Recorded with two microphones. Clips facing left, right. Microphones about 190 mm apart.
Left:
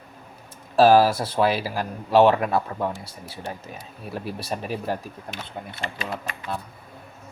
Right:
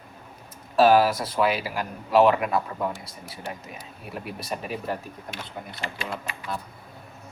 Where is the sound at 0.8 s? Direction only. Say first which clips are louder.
Left 2 dB; 30° left (ahead or behind).